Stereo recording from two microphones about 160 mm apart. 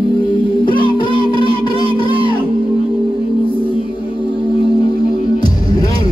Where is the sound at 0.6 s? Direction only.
30° left (ahead or behind).